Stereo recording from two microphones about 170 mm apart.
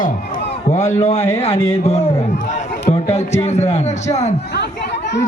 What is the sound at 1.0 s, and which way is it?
A man's voice, 40° left (ahead or behind).